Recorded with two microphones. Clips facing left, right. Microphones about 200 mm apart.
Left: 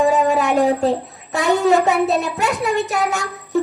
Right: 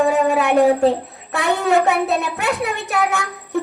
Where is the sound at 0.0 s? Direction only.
60° right (ahead or behind).